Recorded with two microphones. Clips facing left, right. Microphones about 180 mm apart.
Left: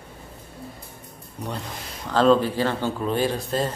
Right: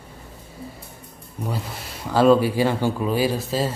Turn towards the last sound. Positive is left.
turn(degrees=-5)  # may be behind; listen again after turning